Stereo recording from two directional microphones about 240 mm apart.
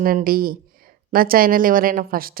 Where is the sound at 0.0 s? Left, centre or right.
Right.